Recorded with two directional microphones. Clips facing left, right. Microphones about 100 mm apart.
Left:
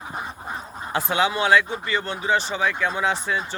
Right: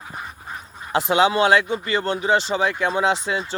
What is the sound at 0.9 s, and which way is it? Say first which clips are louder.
Speech: right 5 dB; 25° right (ahead or behind).